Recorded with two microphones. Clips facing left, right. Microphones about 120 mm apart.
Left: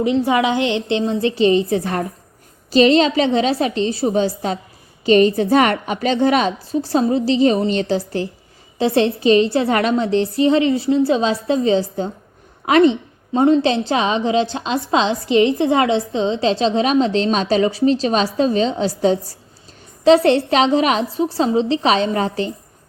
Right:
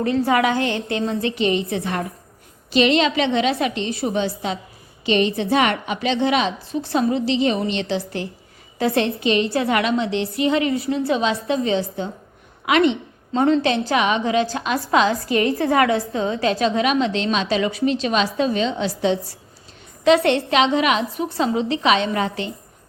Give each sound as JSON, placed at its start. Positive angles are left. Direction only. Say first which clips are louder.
{"t": 0.0, "sound": "a woman's voice", "louder": "left 2 dB", "side_deg": 20}
{"t": 12.6, "sound": "a sound", "louder": "left 4 dB", "side_deg": 35}
{"t": 13.4, "sound": "a woman's voice", "louder": "left 3 dB", "side_deg": 25}